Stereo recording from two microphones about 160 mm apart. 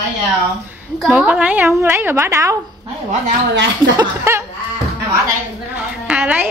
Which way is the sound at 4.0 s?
15° right (ahead or behind).